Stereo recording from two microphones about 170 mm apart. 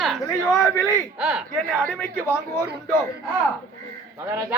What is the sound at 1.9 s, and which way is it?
Speech, 15° left (ahead or behind).